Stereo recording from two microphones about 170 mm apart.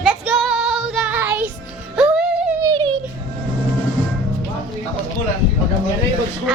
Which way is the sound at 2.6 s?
25° right (ahead or behind).